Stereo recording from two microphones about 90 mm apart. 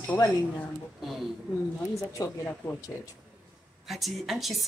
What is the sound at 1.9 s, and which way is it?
Speech, 35° left (ahead or behind).